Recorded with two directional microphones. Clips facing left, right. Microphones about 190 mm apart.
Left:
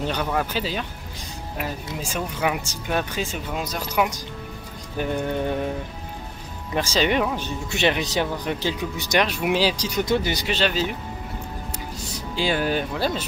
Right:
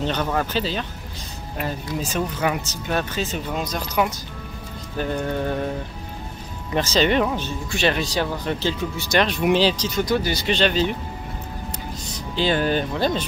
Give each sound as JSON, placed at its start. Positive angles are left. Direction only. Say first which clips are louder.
{"t": 0.0, "sound": "speech", "louder": "right 1 dB", "side_deg": 10}
{"t": 2.0, "sound": "speech", "louder": "right 3 dB", "side_deg": 10}
{"t": 6.7, "sound": "speech", "louder": "right 2 dB", "side_deg": 10}
{"t": 10.0, "sound": "speech", "louder": "even", "side_deg": 20}
{"t": 10.4, "sound": "speech", "louder": "right 3 dB", "side_deg": 5}
{"t": 12.4, "sound": "speech", "louder": "right 2 dB", "side_deg": 10}